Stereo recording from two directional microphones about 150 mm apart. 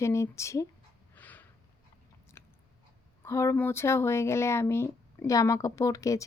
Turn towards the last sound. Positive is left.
turn(degrees=20)  # may be behind; listen again after turning